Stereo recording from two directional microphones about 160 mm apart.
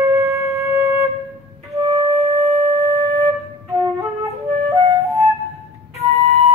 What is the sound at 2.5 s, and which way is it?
Wind instrument, 20° right (ahead or behind).